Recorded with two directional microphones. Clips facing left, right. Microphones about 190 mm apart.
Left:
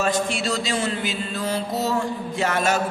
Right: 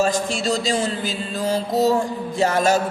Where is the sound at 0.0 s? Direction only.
35° right (ahead or behind).